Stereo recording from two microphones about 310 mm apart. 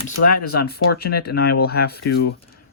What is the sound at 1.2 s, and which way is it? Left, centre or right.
Speech, left.